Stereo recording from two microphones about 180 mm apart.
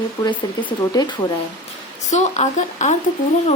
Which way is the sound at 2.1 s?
40° left (ahead or behind).